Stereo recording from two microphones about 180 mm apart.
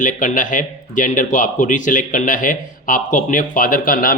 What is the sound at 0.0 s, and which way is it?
Speech, 45° left (ahead or behind).